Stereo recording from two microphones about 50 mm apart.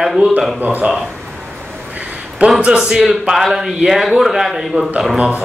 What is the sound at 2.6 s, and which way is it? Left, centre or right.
Speech, right.